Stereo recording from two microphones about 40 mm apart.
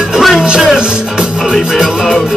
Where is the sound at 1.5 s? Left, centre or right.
Centre.